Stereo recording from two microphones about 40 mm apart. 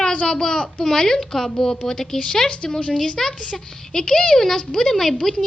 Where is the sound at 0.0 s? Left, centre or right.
Left.